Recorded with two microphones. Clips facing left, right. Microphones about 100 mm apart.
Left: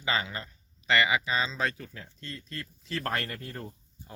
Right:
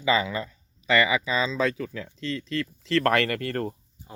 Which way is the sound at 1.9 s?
90° right.